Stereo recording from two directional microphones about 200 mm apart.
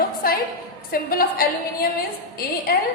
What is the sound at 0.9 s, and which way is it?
Speech, 50° left (ahead or behind).